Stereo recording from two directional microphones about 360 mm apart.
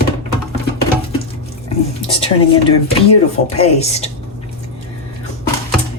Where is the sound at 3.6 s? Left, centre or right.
Centre.